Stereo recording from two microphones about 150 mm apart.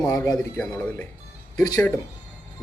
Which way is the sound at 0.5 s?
5° left (ahead or behind).